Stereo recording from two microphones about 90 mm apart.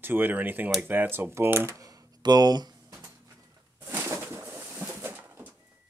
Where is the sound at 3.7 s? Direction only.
25° right (ahead or behind).